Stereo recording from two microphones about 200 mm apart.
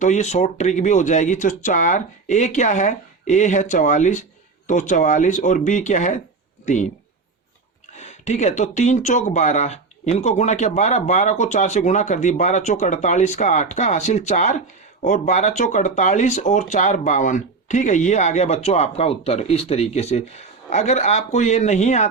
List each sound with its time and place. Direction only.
0.0 s speech: 35° left (ahead or behind)
7.9 s speech: 35° left (ahead or behind)